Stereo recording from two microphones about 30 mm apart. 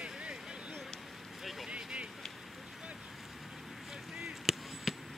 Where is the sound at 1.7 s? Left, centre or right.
Right.